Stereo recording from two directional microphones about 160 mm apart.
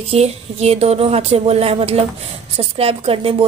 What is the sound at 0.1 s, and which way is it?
Speech, 40° right (ahead or behind).